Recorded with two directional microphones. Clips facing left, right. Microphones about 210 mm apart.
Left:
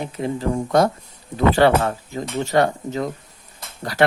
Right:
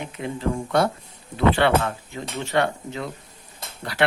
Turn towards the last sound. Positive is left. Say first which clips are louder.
# left 4 dB
turn(degrees=40)  # may be behind; listen again after turning